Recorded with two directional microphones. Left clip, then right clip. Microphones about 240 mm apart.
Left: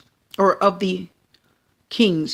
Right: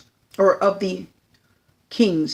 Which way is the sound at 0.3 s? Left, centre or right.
Left.